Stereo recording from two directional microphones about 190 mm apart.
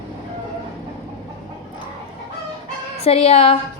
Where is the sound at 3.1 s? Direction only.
30° left (ahead or behind).